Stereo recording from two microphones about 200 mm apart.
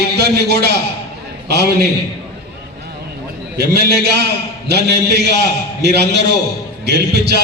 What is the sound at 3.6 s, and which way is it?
A man's voice, 55° right (ahead or behind).